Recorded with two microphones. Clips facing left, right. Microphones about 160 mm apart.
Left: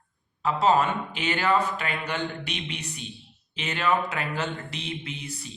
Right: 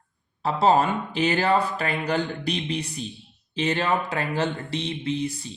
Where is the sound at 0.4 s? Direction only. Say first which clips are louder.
Right 2 dB; 35° right (ahead or behind).